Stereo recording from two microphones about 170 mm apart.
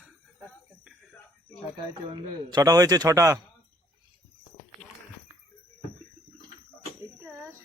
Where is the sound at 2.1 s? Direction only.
25° right (ahead or behind).